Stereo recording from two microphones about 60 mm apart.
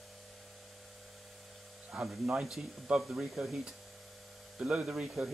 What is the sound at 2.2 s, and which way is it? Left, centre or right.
Speech, centre.